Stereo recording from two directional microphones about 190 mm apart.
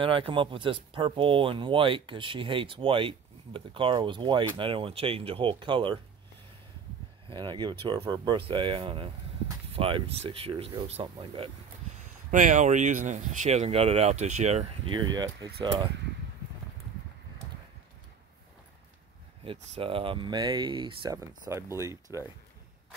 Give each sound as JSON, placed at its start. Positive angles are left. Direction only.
{"t": 0.0, "sound": "speech", "side_deg": -25}
{"t": 7.2, "sound": "speech", "side_deg": -25}
{"t": 12.0, "sound": "speech", "side_deg": -40}
{"t": 14.9, "sound": "speech", "side_deg": -25}
{"t": 19.4, "sound": "speech", "side_deg": -30}